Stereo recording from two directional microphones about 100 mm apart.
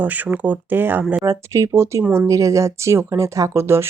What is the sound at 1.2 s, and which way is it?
Speech, 35° right (ahead or behind).